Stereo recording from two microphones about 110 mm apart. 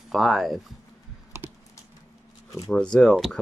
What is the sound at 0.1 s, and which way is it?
Speech, centre (ahead or behind).